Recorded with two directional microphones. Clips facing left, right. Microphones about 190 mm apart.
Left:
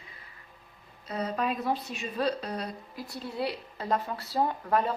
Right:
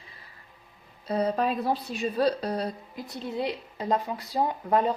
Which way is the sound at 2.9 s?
20° right (ahead or behind).